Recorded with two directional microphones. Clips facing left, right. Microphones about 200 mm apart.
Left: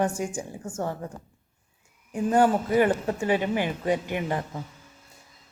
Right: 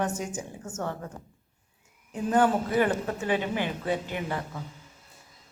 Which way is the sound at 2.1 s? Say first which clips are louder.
Left 2 dB; 10° left (ahead or behind).